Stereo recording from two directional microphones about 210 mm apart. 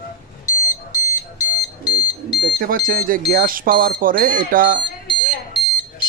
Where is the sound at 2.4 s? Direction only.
45° right (ahead or behind).